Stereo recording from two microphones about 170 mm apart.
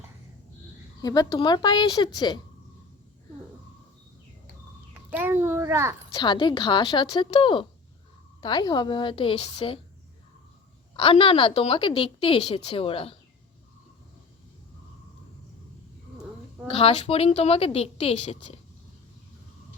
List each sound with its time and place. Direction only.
1.0 s a woman's voice: 20° left (ahead or behind)
5.1 s a child's voice: 10° right (ahead or behind)
6.1 s a woman's voice: 25° left (ahead or behind)
10.9 s a woman's voice: 30° left (ahead or behind)
16.6 s a woman's voice: 35° left (ahead or behind)